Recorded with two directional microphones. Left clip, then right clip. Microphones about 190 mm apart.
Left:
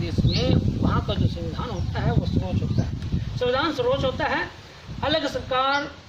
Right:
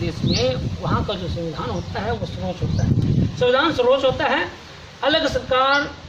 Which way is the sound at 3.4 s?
20° left (ahead or behind).